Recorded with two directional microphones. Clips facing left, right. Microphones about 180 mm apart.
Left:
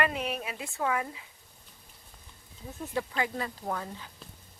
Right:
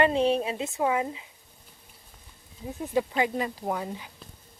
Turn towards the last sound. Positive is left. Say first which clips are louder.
# right 4 dB
turn(degrees=-15)  # may be behind; listen again after turning